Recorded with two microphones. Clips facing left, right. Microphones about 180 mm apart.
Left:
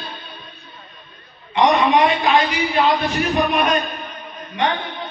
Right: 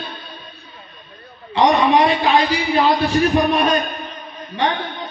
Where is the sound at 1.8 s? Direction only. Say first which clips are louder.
Right 1 dB; 35° right (ahead or behind).